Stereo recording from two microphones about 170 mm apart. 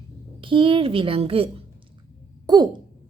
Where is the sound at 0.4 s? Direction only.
30° right (ahead or behind).